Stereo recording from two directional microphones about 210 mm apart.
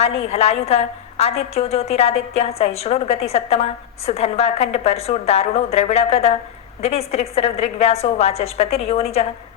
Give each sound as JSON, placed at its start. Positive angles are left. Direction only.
{"t": 0.0, "sound": "a woman's voice", "side_deg": 30}